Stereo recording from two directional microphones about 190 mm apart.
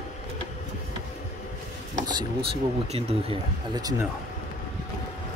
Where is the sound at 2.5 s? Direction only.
30° right (ahead or behind).